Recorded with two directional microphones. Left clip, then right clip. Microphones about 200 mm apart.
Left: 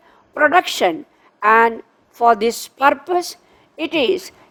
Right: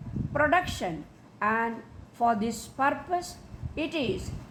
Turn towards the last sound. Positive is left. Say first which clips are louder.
# left 12 dB
turn(degrees=60)  # may be behind; listen again after turning